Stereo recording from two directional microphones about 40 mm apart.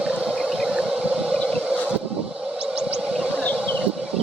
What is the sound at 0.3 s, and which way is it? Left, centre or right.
Whale vocalization, centre.